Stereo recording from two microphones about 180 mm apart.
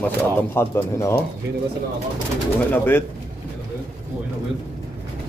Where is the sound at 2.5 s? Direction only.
10° left (ahead or behind).